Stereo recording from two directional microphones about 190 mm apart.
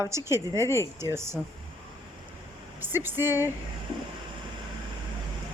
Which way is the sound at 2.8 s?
10° right (ahead or behind).